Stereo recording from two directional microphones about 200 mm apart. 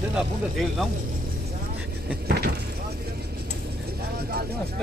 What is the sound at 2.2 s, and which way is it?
Speech, 55° right (ahead or behind).